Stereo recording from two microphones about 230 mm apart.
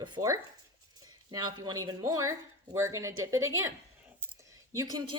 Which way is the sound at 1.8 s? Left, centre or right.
Centre.